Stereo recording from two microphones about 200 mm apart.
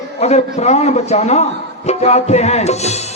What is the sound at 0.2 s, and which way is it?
A man's voice, 35° left (ahead or behind).